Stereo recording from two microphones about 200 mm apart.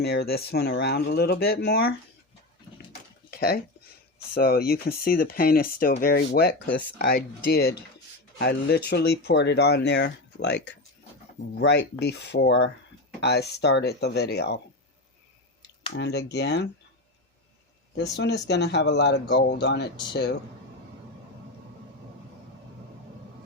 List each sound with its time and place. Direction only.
0.0 s speech: 55° left (ahead or behind)
3.2 s a sound: 50° left (ahead or behind)
4.4 s speech: 50° left (ahead or behind)
15.9 s speech: 55° left (ahead or behind)
18.2 s speech: 60° left (ahead or behind)